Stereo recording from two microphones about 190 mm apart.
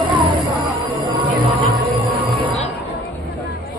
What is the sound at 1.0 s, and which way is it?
Music, 25° right (ahead or behind).